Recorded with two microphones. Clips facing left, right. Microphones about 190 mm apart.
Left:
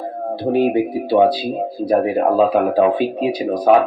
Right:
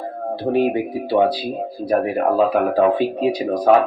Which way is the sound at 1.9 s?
15° left (ahead or behind).